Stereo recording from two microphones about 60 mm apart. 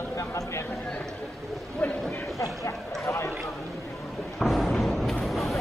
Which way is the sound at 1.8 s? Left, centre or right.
Centre.